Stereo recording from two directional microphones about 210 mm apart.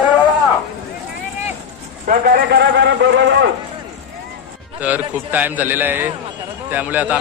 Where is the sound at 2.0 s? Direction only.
45° right (ahead or behind).